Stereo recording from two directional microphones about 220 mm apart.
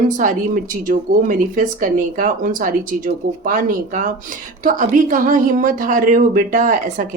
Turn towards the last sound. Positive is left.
turn(degrees=-35)  # may be behind; listen again after turning